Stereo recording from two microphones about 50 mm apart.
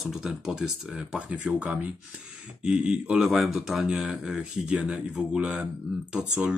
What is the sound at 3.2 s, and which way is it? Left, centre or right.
Speech, centre.